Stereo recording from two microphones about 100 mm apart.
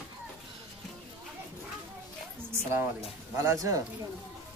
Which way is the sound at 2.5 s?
25° right (ahead or behind).